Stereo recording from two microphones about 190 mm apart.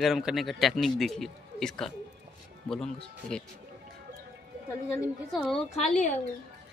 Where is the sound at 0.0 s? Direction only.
Centre (ahead or behind).